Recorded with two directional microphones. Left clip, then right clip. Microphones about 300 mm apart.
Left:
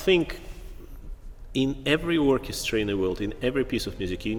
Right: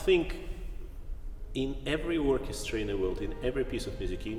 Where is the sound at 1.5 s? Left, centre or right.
Left.